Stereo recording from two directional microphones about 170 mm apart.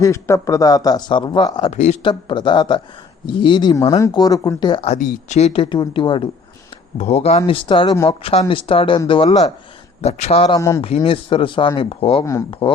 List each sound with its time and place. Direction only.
0.0 s speech: 15° left (ahead or behind)
1.7 s speech: 40° left (ahead or behind); by 4.9 s 25° left (ahead or behind)
4.9 s speech: 45° left (ahead or behind)
12.2 s speech: 20° left (ahead or behind)
12.5 s speech: 30° left (ahead or behind)